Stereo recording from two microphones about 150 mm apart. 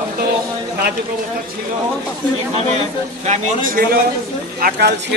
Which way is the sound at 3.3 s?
70° right (ahead or behind).